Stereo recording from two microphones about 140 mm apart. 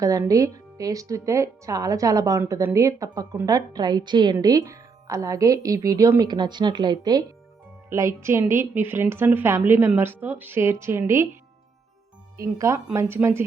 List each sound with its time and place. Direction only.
0.0 s a woman's voice: 25° right (ahead or behind)
12.4 s a woman's voice: 20° right (ahead or behind)